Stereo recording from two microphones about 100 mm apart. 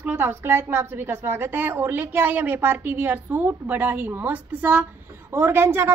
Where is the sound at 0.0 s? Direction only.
20° right (ahead or behind).